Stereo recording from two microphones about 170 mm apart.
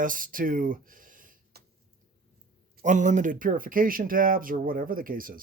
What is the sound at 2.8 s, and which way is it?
Speech, 45° right (ahead or behind).